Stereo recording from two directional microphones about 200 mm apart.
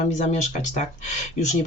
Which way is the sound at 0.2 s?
35° left (ahead or behind).